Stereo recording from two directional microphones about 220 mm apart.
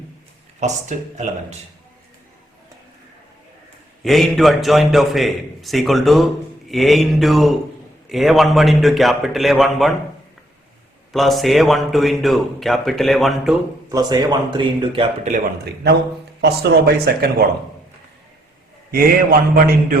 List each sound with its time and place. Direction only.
0.6 s speech: 35° right (ahead or behind)
4.0 s speech: centre (ahead or behind)
11.1 s speech: centre (ahead or behind)
13.9 s speech: 20° right (ahead or behind)
15.6 s a man's voice: 50° right (ahead or behind)
18.9 s a man's voice: 40° right (ahead or behind)